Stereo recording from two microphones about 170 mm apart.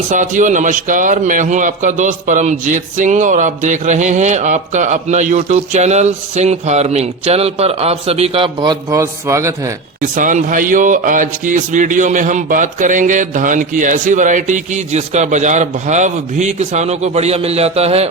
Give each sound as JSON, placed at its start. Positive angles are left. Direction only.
{"t": 0.1, "sound": "a man's voice", "side_deg": -45}
{"t": 10.2, "sound": "a man's voice", "side_deg": -50}